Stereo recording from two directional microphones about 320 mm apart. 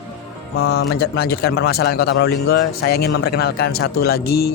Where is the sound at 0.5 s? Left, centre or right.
Left.